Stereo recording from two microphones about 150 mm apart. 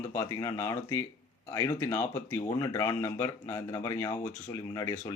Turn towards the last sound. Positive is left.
turn(degrees=25)  # may be behind; listen again after turning